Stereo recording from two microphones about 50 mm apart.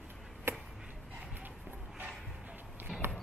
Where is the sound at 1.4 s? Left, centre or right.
Right.